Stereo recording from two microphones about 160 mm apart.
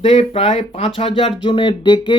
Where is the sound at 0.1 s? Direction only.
40° left (ahead or behind).